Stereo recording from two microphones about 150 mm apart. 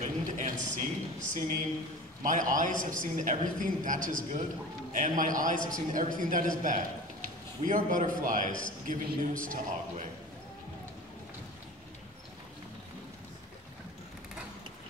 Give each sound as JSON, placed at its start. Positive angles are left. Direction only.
{"t": 0.0, "sound": "a sound", "side_deg": -55}
{"t": 2.2, "sound": "a man's voice", "side_deg": -60}
{"t": 7.6, "sound": "a man's voice", "side_deg": -60}